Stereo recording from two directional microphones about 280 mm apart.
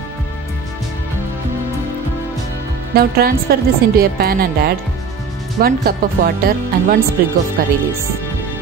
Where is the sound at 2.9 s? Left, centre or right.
Right.